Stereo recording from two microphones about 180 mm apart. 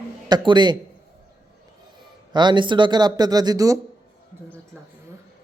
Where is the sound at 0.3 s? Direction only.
25° right (ahead or behind).